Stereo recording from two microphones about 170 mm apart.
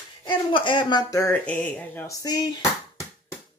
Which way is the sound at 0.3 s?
30° left (ahead or behind).